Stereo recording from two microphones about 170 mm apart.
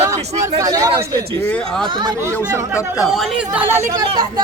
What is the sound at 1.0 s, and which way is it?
Speech, 65° right (ahead or behind).